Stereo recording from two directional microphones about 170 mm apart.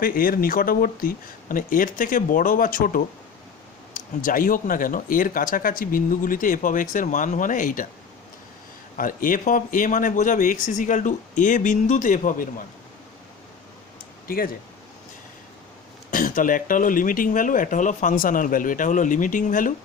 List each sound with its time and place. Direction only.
0.0 s speech: 55° left (ahead or behind)
9.0 s speech: 55° left (ahead or behind)
14.3 s speech: 60° left (ahead or behind)
16.1 s speech: 55° left (ahead or behind)